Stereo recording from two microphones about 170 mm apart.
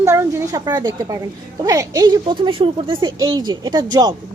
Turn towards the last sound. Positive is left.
turn(degrees=-25)  # may be behind; listen again after turning